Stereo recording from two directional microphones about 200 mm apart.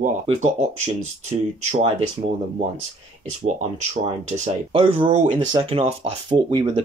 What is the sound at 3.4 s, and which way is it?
Speech, 35° right (ahead or behind).